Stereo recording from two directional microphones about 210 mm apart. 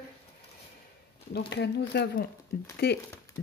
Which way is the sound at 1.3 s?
50° left (ahead or behind).